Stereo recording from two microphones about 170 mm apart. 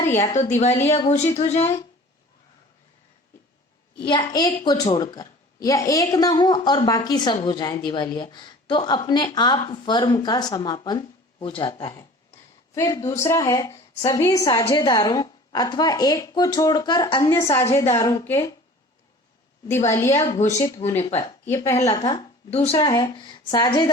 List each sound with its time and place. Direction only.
0.2 s speech: 40° left (ahead or behind)
3.9 s speech: 30° left (ahead or behind)
14.4 s speech: 30° left (ahead or behind)
14.8 s speech: 20° left (ahead or behind)
19.9 s speech: 15° left (ahead or behind)
22.1 s speech: 35° left (ahead or behind)
22.9 s speech: 25° left (ahead or behind)